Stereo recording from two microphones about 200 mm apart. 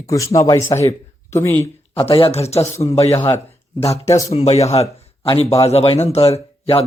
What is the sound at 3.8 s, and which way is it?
Speech, 30° left (ahead or behind).